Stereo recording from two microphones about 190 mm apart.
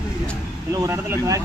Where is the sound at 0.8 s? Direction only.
15° right (ahead or behind).